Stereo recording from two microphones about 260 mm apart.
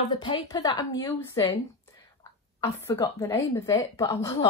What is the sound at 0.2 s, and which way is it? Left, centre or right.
Speech, centre.